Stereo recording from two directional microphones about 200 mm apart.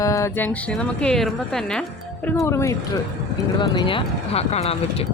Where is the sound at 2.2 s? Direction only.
15° left (ahead or behind); by 5.0 s 30° left (ahead or behind).